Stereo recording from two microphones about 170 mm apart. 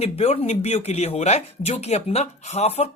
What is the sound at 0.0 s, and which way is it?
Speech, 40° left (ahead or behind).